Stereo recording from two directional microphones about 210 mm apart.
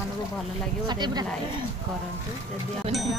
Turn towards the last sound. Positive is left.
turn(degrees=0)  # may be behind; listen again after turning